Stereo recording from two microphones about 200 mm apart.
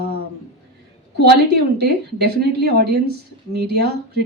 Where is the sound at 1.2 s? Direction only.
50° right (ahead or behind).